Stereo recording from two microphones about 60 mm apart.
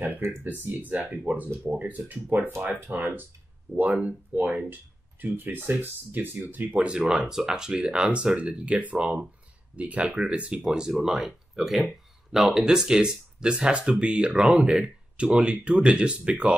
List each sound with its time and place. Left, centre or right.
0.2 s speech: right
0.7 s speech: right
6.8 s speech: centre